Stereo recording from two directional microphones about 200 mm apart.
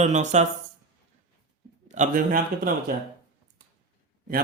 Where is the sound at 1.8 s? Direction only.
40° right (ahead or behind).